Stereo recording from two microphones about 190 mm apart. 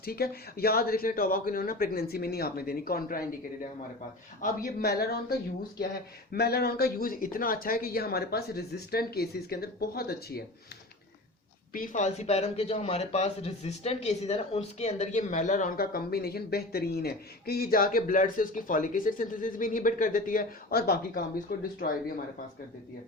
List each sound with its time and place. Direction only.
0.0 s a man's voice: 55° left (ahead or behind)
11.7 s a man's voice: 45° left (ahead or behind)